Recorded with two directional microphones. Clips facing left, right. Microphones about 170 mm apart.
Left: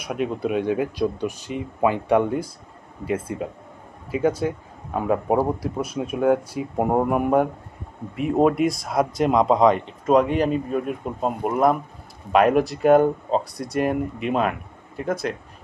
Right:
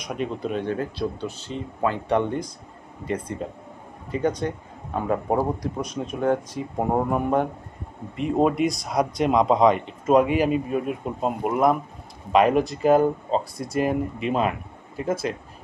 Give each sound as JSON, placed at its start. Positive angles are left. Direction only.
{"t": 0.0, "sound": "speech", "side_deg": 5}